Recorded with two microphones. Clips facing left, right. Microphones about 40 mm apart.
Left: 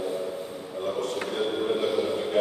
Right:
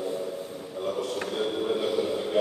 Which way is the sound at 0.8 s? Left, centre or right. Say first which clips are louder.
Left 1 dB; centre.